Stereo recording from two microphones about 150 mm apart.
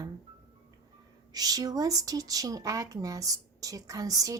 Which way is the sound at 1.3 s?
25° right (ahead or behind).